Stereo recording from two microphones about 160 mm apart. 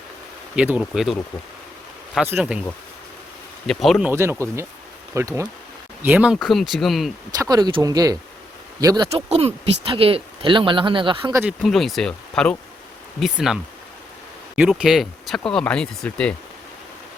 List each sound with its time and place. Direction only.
0.5 s speech: 5° right (ahead or behind)
2.2 s speech: 10° right (ahead or behind)
3.7 s speech: centre (ahead or behind)
4.1 s speech: 15° right (ahead or behind); by 7.1 s centre (ahead or behind)
7.3 s speech: 25° right (ahead or behind)
9.1 s speech: 40° right (ahead or behind)
11.3 s speech: 5° right (ahead or behind)